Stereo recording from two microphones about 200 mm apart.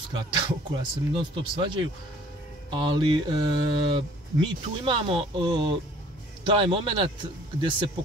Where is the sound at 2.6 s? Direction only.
25° right (ahead or behind).